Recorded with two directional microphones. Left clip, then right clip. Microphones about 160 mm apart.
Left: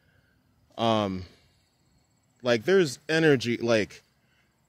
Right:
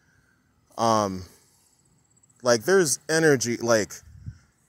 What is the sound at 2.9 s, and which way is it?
Speech, 15° left (ahead or behind).